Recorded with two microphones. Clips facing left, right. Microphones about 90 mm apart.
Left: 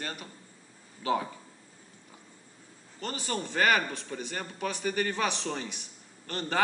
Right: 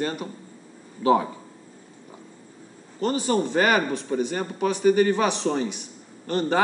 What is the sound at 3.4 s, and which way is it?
A man's voice, 15° right (ahead or behind).